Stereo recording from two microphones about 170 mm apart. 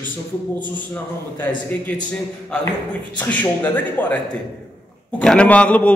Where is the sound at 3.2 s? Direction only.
10° left (ahead or behind).